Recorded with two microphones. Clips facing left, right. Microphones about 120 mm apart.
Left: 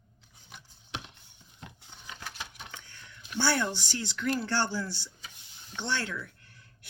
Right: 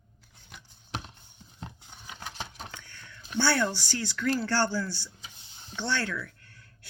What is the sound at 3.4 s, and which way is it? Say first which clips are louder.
Speech: right 2 dB; 20° left (ahead or behind).